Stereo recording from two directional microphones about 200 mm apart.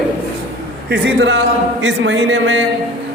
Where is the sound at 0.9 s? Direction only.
60° right (ahead or behind).